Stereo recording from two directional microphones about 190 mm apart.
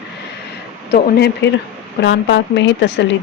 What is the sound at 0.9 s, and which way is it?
Speech, 60° left (ahead or behind).